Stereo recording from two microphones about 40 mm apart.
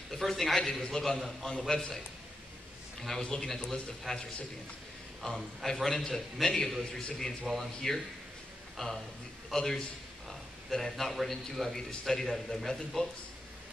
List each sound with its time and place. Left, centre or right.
0.1 s a man's voice: centre
3.0 s a man's voice: centre
7.5 s speech: centre
7.8 s a man's voice: centre
9.6 s a man's voice: centre